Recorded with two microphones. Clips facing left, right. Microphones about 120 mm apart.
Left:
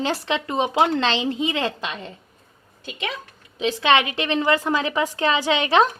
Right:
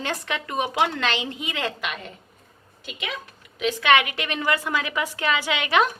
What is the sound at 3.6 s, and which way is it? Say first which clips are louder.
A woman's voice: left 1 dB; 25° left (ahead or behind).